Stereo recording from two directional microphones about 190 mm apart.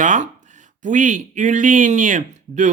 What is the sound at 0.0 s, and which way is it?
Speech, 40° right (ahead or behind).